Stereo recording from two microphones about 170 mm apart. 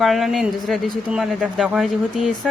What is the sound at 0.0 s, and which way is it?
Speech, centre (ahead or behind).